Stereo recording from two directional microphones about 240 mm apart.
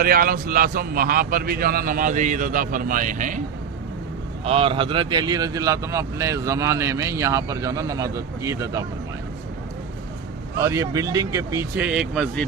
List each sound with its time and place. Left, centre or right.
0.0 s a man's voice: right
4.4 s speech: right
10.6 s speech: centre